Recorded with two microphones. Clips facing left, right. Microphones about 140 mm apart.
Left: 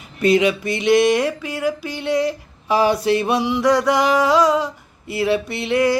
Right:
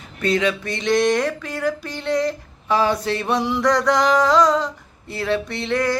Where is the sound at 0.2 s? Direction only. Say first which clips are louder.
Left 4 dB; 10° left (ahead or behind).